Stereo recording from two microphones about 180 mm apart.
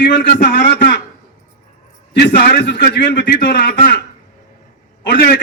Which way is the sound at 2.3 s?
55° left (ahead or behind).